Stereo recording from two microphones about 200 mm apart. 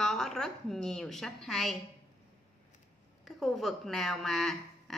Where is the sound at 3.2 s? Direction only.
Centre (ahead or behind).